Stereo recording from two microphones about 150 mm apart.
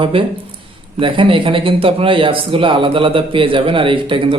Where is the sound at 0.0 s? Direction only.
35° right (ahead or behind).